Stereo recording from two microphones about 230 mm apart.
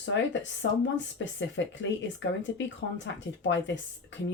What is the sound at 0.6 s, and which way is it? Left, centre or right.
Speech, left.